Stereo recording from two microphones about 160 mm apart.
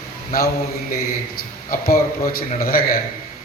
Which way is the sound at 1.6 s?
65° left (ahead or behind).